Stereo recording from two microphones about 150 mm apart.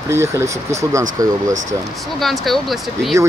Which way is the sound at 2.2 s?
Centre (ahead or behind).